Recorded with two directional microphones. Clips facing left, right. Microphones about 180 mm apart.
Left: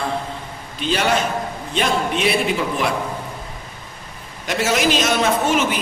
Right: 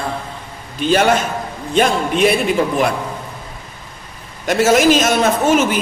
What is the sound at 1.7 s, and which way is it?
Speech, 45° right (ahead or behind).